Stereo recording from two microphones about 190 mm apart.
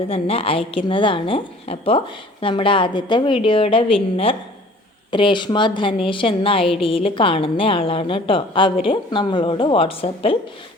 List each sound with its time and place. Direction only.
0.1 s a woman's voice: 30° left (ahead or behind)